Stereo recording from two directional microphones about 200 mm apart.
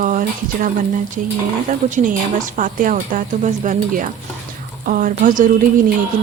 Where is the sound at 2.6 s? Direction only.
40° right (ahead or behind).